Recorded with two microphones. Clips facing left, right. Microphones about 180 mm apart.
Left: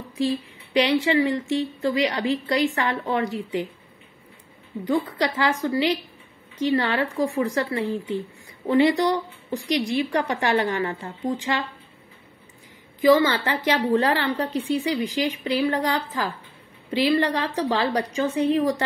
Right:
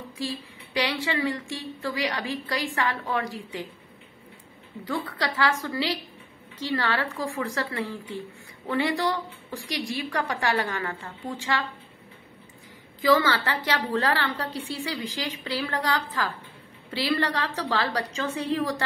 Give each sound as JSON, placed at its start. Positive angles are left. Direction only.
{"t": 0.2, "sound": "speech", "side_deg": 20}
{"t": 4.8, "sound": "speech", "side_deg": 20}
{"t": 13.0, "sound": "a woman's voice", "side_deg": 20}